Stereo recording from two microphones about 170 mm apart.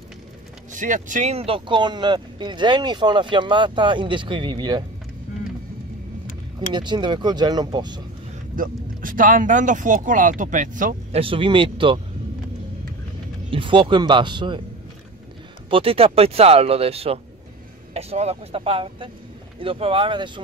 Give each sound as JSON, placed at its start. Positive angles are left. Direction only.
{"t": 0.7, "sound": "speech", "side_deg": -50}
{"t": 6.7, "sound": "speech", "side_deg": -25}
{"t": 8.5, "sound": "speech", "side_deg": -55}
{"t": 11.1, "sound": "speech", "side_deg": -30}
{"t": 13.5, "sound": "speech", "side_deg": -30}
{"t": 15.7, "sound": "speech", "side_deg": -35}